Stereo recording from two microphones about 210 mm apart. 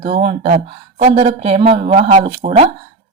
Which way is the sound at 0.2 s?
25° right (ahead or behind).